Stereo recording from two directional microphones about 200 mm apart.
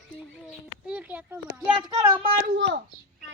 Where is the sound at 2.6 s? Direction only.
60° right (ahead or behind).